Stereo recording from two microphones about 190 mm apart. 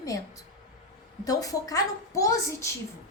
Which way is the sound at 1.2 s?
20° left (ahead or behind).